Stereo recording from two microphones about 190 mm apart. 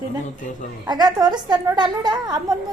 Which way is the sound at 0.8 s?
20° right (ahead or behind).